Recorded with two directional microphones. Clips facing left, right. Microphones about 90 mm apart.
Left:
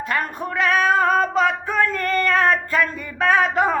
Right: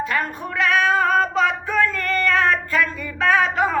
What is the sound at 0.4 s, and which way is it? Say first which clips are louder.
Female singing: left 1 dB; 40° left (ahead or behind).